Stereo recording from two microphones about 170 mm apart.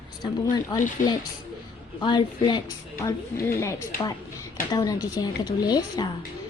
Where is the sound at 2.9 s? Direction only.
15° left (ahead or behind).